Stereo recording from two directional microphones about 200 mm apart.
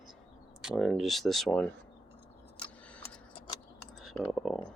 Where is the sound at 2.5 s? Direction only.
5° left (ahead or behind).